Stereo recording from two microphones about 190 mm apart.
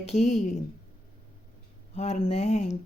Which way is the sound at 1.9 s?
35° left (ahead or behind).